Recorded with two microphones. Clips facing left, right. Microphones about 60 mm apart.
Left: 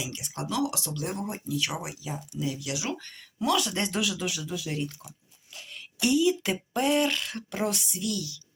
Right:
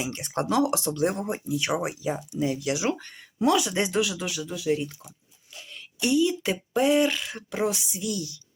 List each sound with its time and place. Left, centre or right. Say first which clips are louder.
0.0 s speech: right 6 dB; right
3.0 s speech: right 7 dB; centre